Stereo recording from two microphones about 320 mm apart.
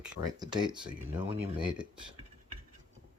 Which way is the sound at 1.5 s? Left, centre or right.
Centre.